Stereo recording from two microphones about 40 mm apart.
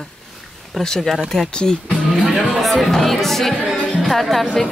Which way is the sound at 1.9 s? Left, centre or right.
Centre.